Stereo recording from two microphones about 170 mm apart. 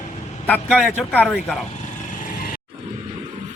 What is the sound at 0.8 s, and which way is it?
Speech, 10° left (ahead or behind).